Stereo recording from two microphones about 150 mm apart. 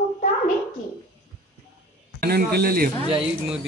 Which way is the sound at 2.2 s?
90° right.